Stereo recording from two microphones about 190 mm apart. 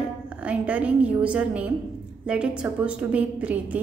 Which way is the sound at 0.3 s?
5° right (ahead or behind).